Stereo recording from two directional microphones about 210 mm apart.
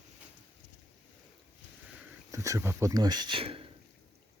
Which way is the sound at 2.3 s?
15° right (ahead or behind).